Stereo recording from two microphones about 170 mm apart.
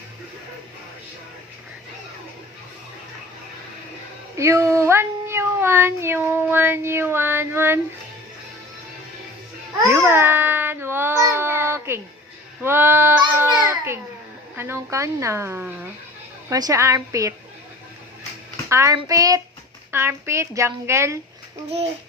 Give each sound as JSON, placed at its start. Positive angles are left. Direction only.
{"t": 4.4, "sound": "speech", "side_deg": -15}
{"t": 9.9, "sound": "speech", "side_deg": -15}
{"t": 13.7, "sound": "babbling", "side_deg": -15}
{"t": 14.5, "sound": "a woman's voice", "side_deg": -15}
{"t": 18.7, "sound": "a woman's voice", "side_deg": -15}